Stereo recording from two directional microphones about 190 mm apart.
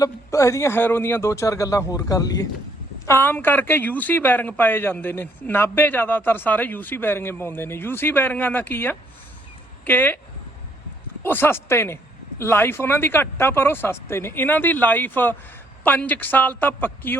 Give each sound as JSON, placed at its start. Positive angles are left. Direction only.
{"t": 0.0, "sound": "speech", "side_deg": 15}
{"t": 11.2, "sound": "speech", "side_deg": 10}